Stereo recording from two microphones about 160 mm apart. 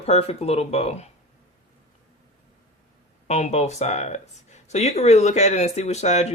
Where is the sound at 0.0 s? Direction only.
40° left (ahead or behind).